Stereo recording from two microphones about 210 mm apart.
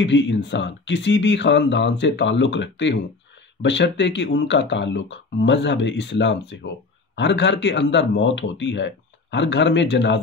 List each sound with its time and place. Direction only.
0.0 s speech: 60° left (ahead or behind)